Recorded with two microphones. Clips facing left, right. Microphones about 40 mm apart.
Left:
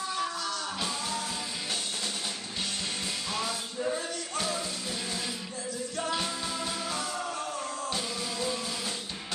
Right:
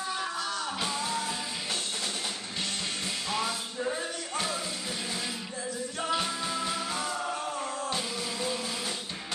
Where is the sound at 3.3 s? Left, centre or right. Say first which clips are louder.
Right 3 dB; centre.